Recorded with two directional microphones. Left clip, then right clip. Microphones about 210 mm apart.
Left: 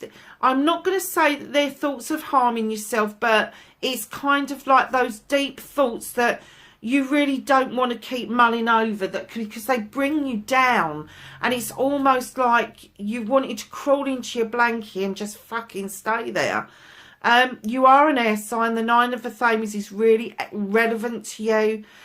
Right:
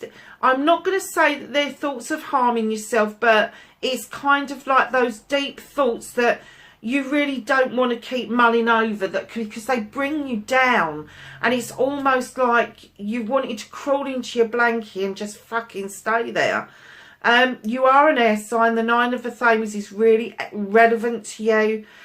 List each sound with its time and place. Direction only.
0.3 s a woman's voice: 45° left (ahead or behind)